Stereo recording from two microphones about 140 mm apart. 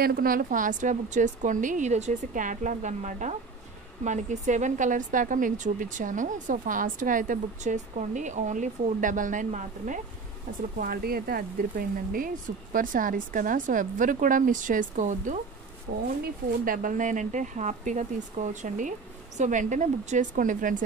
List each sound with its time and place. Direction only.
0.0 s a woman's voice: 90° right; by 9.9 s 60° right (ahead or behind)
10.8 s speech: 90° right; by 15.4 s 65° right (ahead or behind)
16.4 s a woman's voice: 85° right; by 20.7 s 70° right (ahead or behind)